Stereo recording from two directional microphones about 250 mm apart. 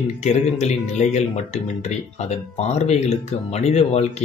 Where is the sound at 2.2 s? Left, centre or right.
Left.